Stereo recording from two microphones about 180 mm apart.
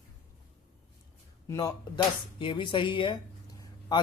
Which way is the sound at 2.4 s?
30° left (ahead or behind).